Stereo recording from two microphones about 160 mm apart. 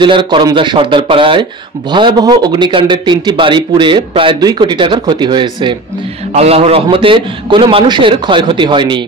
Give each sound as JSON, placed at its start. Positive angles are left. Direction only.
{"t": 0.0, "sound": "speech", "side_deg": -30}
{"t": 6.3, "sound": "a man's voice", "side_deg": -40}